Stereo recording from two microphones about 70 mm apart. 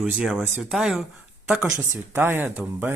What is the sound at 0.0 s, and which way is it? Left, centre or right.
Speech, centre.